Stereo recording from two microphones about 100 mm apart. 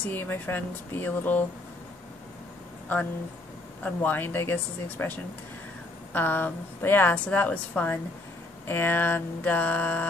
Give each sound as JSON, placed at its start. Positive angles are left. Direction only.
{"t": 0.0, "sound": "speech", "side_deg": 20}
{"t": 3.8, "sound": "speech", "side_deg": 20}
{"t": 7.2, "sound": "a sound", "side_deg": 15}